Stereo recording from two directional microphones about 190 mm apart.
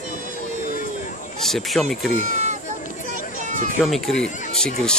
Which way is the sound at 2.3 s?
40° right (ahead or behind).